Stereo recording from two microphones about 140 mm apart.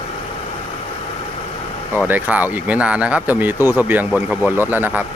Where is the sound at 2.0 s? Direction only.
10° right (ahead or behind).